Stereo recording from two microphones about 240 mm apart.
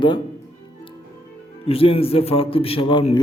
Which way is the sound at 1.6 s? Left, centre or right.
Left.